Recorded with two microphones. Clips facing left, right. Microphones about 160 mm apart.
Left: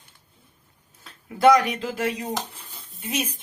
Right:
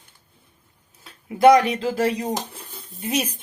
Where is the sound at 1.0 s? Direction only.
20° right (ahead or behind).